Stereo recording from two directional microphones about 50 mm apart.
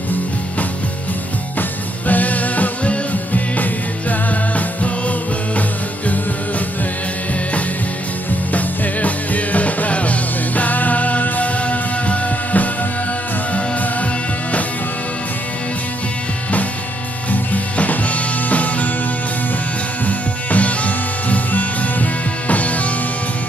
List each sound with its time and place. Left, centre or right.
1.6 s music: left
8.5 s music: left
17.3 s music: left
20.1 s music: left